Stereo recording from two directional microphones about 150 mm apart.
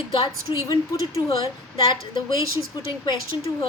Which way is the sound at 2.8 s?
30° left (ahead or behind).